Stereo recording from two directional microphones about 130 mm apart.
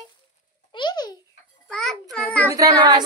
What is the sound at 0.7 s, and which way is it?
Babbling, 35° left (ahead or behind).